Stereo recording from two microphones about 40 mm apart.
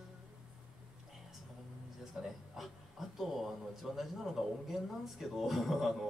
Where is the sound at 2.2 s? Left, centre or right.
Centre.